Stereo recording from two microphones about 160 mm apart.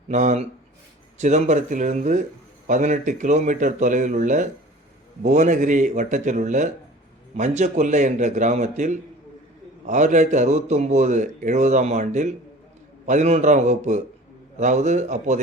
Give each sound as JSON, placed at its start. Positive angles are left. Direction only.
{"t": 0.1, "sound": "speech", "side_deg": -45}